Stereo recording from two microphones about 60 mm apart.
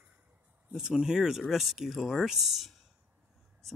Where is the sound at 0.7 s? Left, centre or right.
Centre.